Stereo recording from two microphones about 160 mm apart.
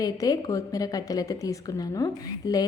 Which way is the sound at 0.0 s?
20° left (ahead or behind).